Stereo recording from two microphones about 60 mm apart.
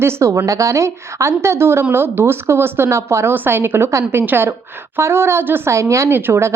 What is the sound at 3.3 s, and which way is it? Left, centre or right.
A woman's voice, right.